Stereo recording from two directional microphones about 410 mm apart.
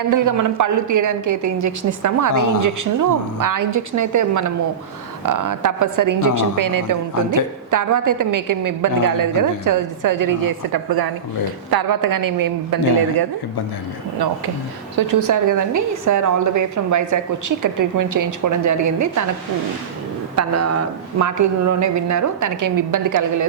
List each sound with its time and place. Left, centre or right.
0.1 s a woman's voice: right
14.9 s a woman's voice: right
20.3 s a woman's voice: right